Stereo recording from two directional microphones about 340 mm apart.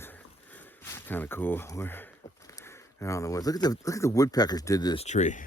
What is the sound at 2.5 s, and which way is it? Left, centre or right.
Speech, centre.